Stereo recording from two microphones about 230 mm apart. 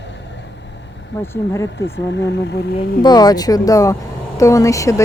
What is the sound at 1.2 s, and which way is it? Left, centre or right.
Speech, centre.